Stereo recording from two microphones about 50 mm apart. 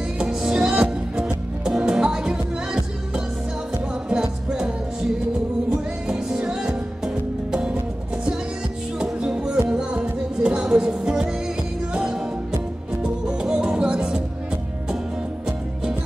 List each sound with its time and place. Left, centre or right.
0.2 s music: centre
4.1 s music: centre
6.0 s music: centre
9.2 s music: centre